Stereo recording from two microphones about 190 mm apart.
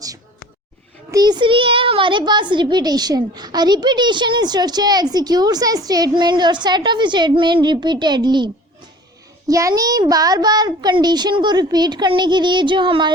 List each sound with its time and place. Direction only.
1.1 s a child's voice: 20° right (ahead or behind)
9.5 s a child's voice: 15° right (ahead or behind)